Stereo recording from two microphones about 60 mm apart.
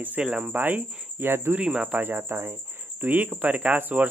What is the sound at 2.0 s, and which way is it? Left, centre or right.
Speech, right.